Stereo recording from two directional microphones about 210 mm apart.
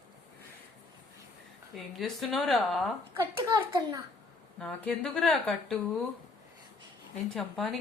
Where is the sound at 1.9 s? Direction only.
Centre (ahead or behind).